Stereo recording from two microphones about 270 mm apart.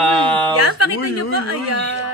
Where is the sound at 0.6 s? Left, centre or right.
Right.